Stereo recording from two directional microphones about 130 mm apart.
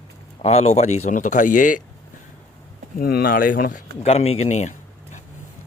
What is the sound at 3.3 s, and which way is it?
Speech, 90° left.